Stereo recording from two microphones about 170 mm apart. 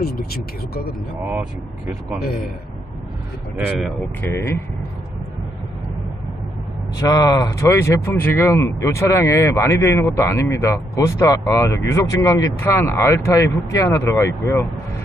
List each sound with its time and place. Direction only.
3.5 s speech: 5° right (ahead or behind)
4.3 s speech: 15° left (ahead or behind)
7.0 s speech: 20° left (ahead or behind)